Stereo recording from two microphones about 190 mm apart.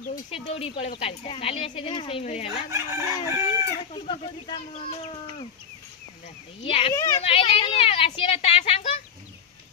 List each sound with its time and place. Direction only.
0.3 s speech: 30° left (ahead or behind)
2.7 s speech: 15° right (ahead or behind)
3.9 s speech: 30° left (ahead or behind)
6.6 s a woman's voice: 30° left (ahead or behind)
6.9 s speech: 15° left (ahead or behind)
7.2 s a woman's voice: 30° left (ahead or behind)